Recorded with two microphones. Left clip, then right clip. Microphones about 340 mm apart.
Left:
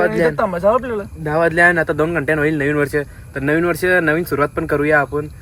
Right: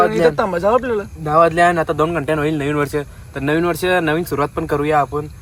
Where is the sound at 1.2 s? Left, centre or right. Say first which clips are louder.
Right 1 dB; centre.